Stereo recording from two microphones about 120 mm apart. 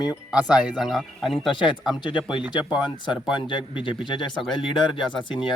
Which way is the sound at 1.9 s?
40° left (ahead or behind).